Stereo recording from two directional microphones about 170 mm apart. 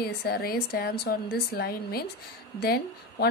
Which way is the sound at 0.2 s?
65° left (ahead or behind).